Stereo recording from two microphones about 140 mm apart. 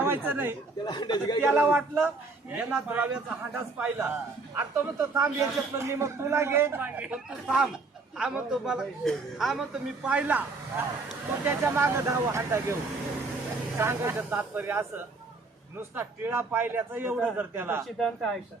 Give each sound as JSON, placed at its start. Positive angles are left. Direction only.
{"t": 0.0, "sound": "speech", "side_deg": -15}
{"t": 0.9, "sound": "a man's voice", "side_deg": 30}
{"t": 1.4, "sound": "a man's voice", "side_deg": -15}
{"t": 13.7, "sound": "a man's voice", "side_deg": -15}
{"t": 16.0, "sound": "a man's voice", "side_deg": -15}
{"t": 17.8, "sound": "a man's voice", "side_deg": 0}